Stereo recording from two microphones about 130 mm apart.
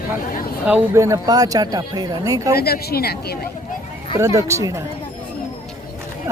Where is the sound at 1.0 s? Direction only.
25° right (ahead or behind).